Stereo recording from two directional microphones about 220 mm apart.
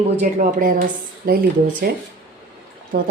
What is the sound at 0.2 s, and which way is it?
Speech, 40° right (ahead or behind).